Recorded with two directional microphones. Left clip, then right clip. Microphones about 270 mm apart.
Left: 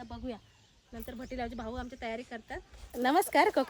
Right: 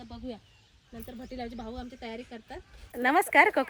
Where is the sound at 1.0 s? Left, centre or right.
Centre.